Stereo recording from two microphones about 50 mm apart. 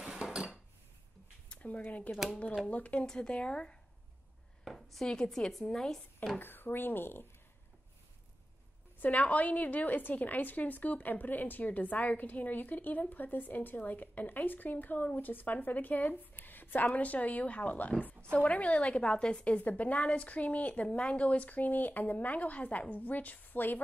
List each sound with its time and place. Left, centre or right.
0.0 s dishes: centre
1.5 s speech: left
4.6 s a sound: centre
5.3 s speech: centre
6.4 s speech: left
9.0 s a woman's voice: left